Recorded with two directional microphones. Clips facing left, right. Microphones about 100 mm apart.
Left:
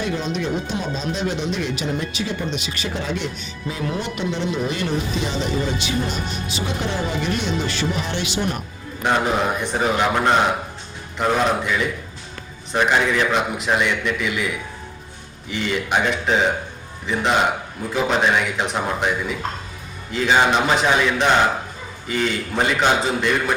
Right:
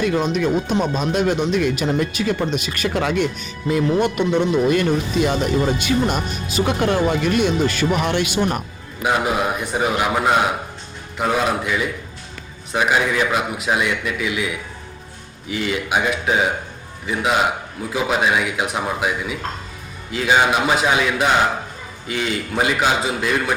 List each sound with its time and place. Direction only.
0.0 s speech: 55° right (ahead or behind)
9.0 s a man's voice: 10° right (ahead or behind)